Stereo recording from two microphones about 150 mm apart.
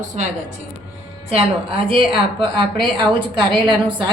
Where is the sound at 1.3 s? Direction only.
40° right (ahead or behind).